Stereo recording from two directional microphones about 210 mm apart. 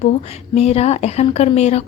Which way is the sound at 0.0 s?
30° left (ahead or behind).